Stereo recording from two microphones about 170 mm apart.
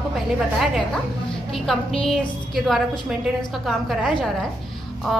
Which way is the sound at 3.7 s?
Centre (ahead or behind).